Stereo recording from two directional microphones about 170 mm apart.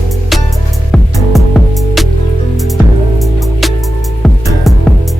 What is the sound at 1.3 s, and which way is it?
Music, centre (ahead or behind).